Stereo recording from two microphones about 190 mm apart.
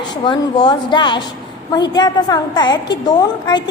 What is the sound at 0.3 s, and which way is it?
A woman's voice, 25° left (ahead or behind).